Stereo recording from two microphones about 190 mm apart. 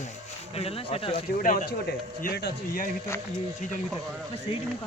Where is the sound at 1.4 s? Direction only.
45° left (ahead or behind).